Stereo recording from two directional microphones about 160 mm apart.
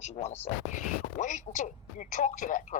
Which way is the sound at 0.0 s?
45° left (ahead or behind).